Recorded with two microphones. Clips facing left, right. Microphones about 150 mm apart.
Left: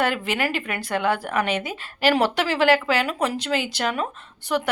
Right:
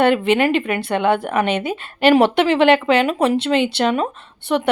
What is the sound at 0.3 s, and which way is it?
A woman's voice, 25° right (ahead or behind).